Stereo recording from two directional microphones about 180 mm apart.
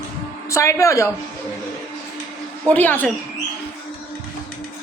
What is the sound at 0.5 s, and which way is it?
Speech, 15° left (ahead or behind).